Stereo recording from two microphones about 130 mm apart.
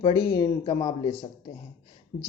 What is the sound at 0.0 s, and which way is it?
Speech, 35° left (ahead or behind).